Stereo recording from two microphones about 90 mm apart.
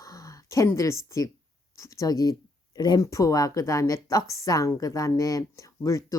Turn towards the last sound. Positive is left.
turn(degrees=35)  # may be behind; listen again after turning